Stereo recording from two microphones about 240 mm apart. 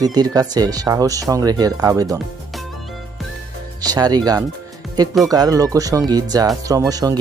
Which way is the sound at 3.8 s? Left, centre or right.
Centre.